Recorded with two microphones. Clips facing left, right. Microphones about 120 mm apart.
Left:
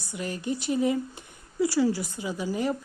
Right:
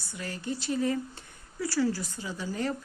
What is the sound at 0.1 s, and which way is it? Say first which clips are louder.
A woman's voice: left 4 dB; 15° left (ahead or behind).